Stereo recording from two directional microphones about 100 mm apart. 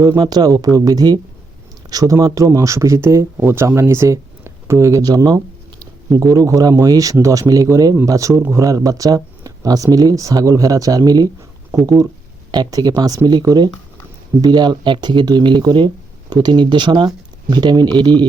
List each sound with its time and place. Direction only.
0.0 s speech: 35° right (ahead or behind)
12.5 s speech: 45° right (ahead or behind)